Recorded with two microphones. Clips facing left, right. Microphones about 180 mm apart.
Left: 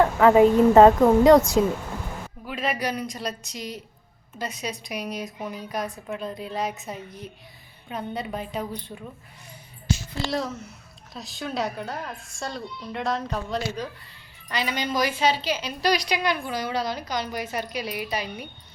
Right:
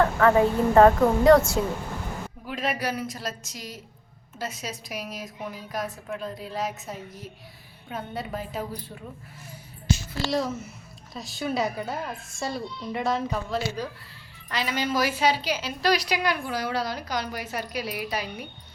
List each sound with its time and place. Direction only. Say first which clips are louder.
0.0 s speech: left 4 dB; 15° left (ahead or behind)
2.5 s a sound: left 1 dB; 5° left (ahead or behind)
2.7 s a woman's voice: left 1 dB; 5° right (ahead or behind)
10.2 s a woman's voice: right 2 dB; centre (ahead or behind)